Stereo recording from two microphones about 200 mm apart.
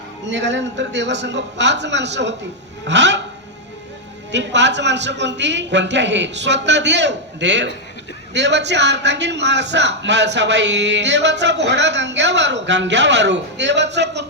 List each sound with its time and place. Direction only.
0.3 s a man's voice: 65° right (ahead or behind)
4.3 s a man's voice: 60° right (ahead or behind)